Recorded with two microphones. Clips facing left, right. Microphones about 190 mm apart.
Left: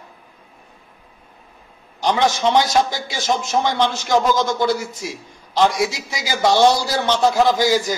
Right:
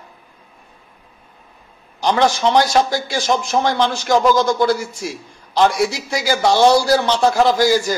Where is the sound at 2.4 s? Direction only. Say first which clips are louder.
Right 2 dB; 20° left (ahead or behind).